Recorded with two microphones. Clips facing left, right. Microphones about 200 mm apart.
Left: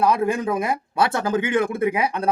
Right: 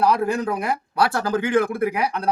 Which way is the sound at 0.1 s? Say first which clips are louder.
Left 1 dB; 20° left (ahead or behind).